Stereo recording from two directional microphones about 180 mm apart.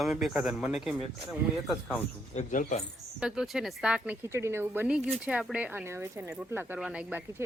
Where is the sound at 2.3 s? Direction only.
45° left (ahead or behind).